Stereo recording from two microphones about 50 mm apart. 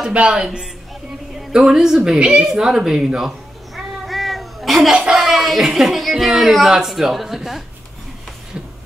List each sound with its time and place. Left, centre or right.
0.1 s speech: centre
3.7 s cat: centre
4.9 s speech: centre
5.2 s speech: centre